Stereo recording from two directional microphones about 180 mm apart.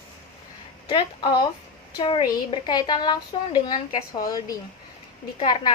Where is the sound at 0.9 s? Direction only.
25° left (ahead or behind).